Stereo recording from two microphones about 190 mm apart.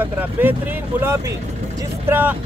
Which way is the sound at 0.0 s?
10° right (ahead or behind).